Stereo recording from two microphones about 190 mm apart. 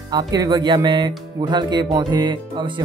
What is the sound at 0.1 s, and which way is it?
Speech, 20° right (ahead or behind).